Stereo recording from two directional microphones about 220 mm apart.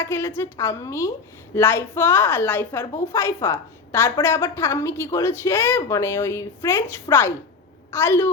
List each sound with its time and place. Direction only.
0.0 s a woman's voice: 10° left (ahead or behind)